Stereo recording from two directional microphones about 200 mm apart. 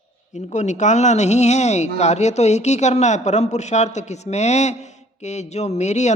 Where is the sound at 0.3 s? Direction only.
35° left (ahead or behind).